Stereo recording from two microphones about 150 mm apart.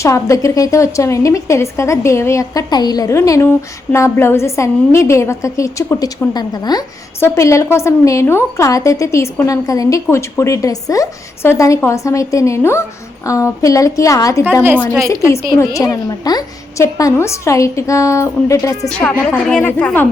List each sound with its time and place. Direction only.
0.0 s a woman's voice: 20° left (ahead or behind)
15.5 s a woman's voice: 20° left (ahead or behind)
18.9 s a woman's voice: 10° left (ahead or behind)